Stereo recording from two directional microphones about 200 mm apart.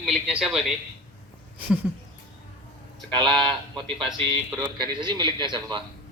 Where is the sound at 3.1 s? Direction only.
20° right (ahead or behind).